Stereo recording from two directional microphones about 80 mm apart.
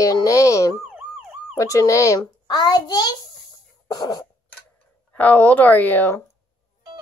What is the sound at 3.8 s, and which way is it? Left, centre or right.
Cough, left.